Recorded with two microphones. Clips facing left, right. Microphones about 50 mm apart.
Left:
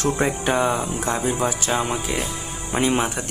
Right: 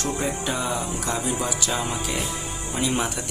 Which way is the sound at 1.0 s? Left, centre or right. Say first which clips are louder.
Left 5 dB; left.